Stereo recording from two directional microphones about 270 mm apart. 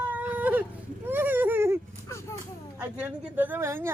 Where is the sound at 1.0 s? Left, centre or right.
Centre.